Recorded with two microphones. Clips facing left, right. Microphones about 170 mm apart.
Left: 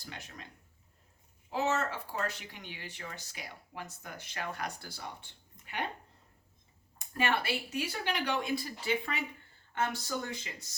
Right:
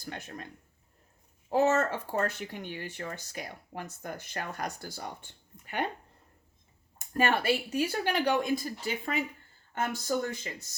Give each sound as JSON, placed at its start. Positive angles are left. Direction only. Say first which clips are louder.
{"t": 0.0, "sound": "speech", "louder": "right 7 dB", "side_deg": -50}
{"t": 1.5, "sound": "speech", "louder": "right 7 dB", "side_deg": -50}
{"t": 7.1, "sound": "speech", "louder": "right 5 dB", "side_deg": -45}